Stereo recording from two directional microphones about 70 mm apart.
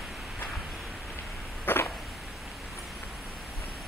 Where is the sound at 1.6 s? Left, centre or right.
Left.